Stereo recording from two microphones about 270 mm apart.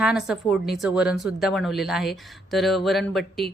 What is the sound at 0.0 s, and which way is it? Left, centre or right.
A woman's voice, centre.